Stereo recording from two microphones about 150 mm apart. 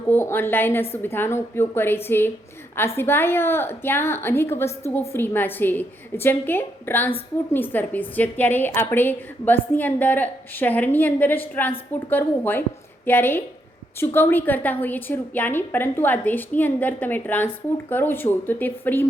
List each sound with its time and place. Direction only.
0.1 s a woman's voice: 15° left (ahead or behind)